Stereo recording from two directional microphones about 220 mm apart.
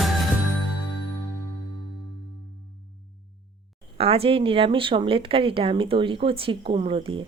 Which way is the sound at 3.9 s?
25° right (ahead or behind).